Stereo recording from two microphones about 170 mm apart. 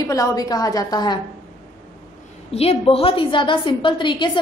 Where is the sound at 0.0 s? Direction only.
20° left (ahead or behind).